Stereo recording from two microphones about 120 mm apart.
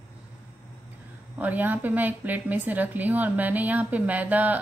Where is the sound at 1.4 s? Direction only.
15° right (ahead or behind).